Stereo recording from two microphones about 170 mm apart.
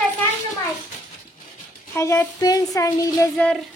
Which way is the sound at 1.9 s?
15° left (ahead or behind).